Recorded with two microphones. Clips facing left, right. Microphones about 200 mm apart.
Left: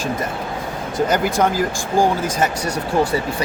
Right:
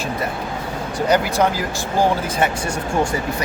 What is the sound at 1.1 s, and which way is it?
Speech, 50° left (ahead or behind).